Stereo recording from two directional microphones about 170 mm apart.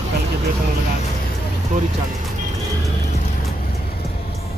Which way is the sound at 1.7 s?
50° right (ahead or behind).